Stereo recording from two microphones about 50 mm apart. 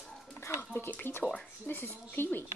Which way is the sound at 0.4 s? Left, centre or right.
Left.